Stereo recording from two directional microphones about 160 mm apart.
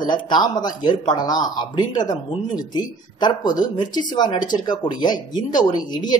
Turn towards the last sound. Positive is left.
turn(degrees=25)  # may be behind; listen again after turning